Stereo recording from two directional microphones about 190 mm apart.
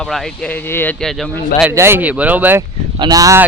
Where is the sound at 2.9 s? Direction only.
20° right (ahead or behind).